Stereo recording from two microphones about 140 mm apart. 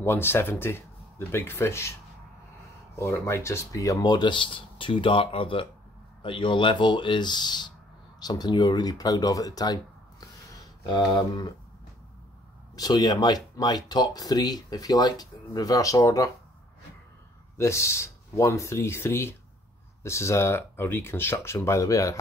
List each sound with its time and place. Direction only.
0.0 s speech: 15° left (ahead or behind)
3.0 s speech: 20° left (ahead or behind)
10.9 s speech: 30° left (ahead or behind)
12.7 s speech: 30° left (ahead or behind)
17.6 s speech: 20° left (ahead or behind)